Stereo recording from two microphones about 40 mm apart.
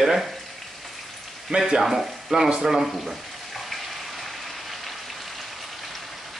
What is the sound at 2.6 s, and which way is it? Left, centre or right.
Frying, centre.